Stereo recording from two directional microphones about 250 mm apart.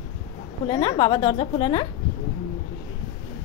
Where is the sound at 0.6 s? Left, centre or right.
Centre.